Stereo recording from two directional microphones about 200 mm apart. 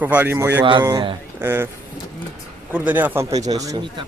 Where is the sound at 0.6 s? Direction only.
25° right (ahead or behind).